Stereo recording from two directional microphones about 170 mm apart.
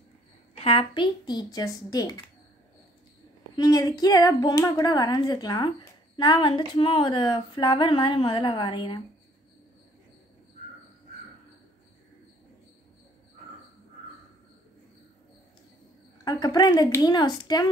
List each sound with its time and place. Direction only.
0.6 s speech: 35° left (ahead or behind)
3.5 s speech: 20° left (ahead or behind)
16.3 s speech: 20° left (ahead or behind)